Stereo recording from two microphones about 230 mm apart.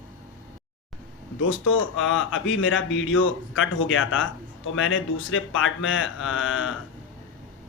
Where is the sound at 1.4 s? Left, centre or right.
Left.